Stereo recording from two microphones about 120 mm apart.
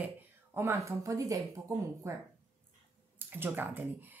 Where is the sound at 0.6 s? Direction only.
25° right (ahead or behind).